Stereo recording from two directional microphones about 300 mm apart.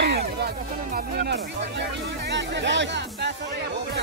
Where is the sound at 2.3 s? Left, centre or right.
Right.